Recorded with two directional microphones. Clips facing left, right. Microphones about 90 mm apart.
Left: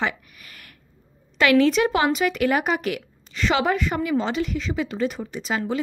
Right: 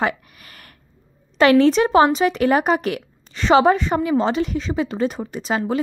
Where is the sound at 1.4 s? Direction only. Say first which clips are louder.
Right 4 dB; 35° right (ahead or behind).